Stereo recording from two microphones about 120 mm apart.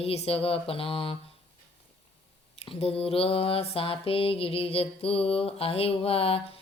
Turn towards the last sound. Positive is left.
turn(degrees=55)  # may be behind; listen again after turning